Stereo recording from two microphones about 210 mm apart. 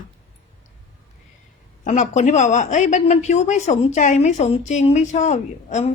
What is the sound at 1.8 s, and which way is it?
Speech, 35° left (ahead or behind).